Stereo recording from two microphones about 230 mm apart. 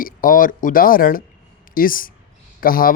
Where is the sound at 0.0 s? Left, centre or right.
Left.